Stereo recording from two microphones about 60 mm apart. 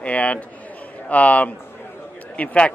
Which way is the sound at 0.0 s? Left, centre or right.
Left.